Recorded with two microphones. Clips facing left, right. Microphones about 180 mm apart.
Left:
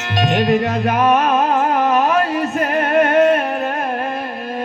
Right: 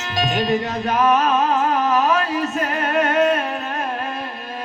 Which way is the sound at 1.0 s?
30° left (ahead or behind).